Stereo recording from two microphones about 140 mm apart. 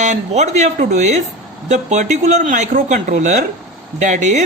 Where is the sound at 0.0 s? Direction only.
60° right (ahead or behind).